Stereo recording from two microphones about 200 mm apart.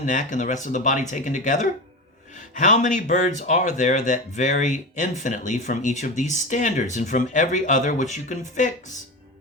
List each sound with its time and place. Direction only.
0.0 s speech: 40° left (ahead or behind)